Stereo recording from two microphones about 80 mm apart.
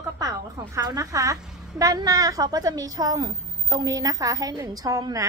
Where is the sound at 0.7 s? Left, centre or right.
Right.